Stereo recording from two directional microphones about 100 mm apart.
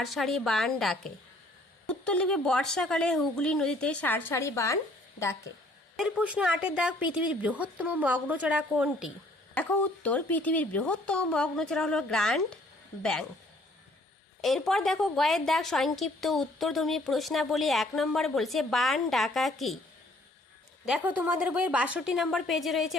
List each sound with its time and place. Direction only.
0.0 s a woman's voice: centre (ahead or behind)
4.0 s a woman's voice: 20° left (ahead or behind)
6.0 s speech: 10° right (ahead or behind)
9.6 s a woman's voice: 15° left (ahead or behind)
14.4 s a woman's voice: centre (ahead or behind)
21.0 s speech: 15° right (ahead or behind)